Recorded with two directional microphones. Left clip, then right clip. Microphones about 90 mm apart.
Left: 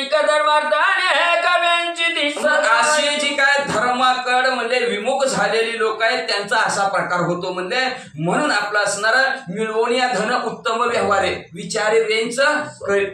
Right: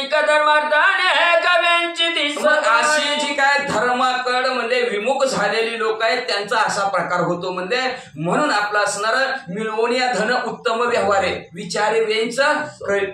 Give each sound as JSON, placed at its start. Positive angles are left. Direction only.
{"t": 0.1, "sound": "singing", "side_deg": -25}
{"t": 2.6, "sound": "a sound", "side_deg": 25}
{"t": 7.7, "sound": "a man's voice", "side_deg": 20}